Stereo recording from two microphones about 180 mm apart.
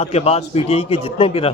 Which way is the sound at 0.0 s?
35° left (ahead or behind).